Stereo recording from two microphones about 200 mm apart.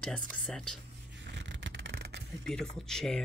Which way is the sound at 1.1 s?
60° right (ahead or behind).